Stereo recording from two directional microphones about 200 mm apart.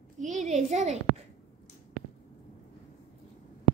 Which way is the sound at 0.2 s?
35° right (ahead or behind).